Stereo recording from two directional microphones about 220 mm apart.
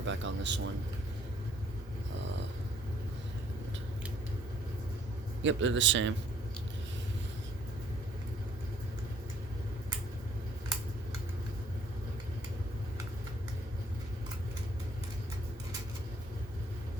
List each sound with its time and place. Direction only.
0.0 s a man's voice: 60° right (ahead or behind)
5.4 s a man's voice: 60° right (ahead or behind)